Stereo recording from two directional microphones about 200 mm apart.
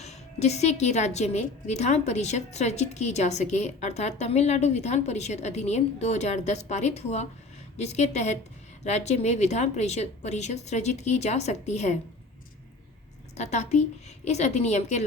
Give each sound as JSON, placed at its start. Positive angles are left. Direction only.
{"t": 0.0, "sound": "a woman's voice", "side_deg": 35}
{"t": 13.3, "sound": "a woman's voice", "side_deg": 35}